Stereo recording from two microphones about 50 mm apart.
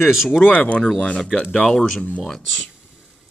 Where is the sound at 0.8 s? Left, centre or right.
Centre.